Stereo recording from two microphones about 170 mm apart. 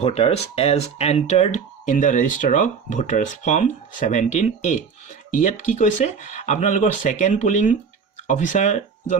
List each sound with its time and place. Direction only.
0.0 s speech: 40° left (ahead or behind)